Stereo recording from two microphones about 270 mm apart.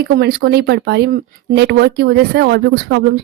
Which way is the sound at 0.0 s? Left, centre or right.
Right.